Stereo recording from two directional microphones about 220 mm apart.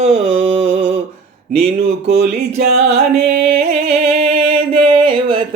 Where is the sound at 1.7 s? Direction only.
45° right (ahead or behind).